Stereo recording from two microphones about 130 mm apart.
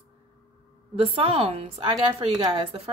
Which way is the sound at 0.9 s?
45° right (ahead or behind).